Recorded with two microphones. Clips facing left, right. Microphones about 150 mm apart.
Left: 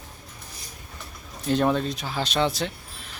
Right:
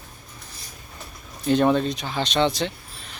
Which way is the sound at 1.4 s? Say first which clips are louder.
Right 3 dB; centre (ahead or behind).